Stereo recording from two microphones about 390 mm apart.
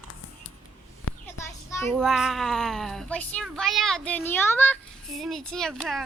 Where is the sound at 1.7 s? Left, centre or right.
Centre.